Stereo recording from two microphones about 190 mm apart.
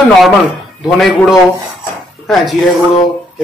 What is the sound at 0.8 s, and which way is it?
Speech, centre (ahead or behind).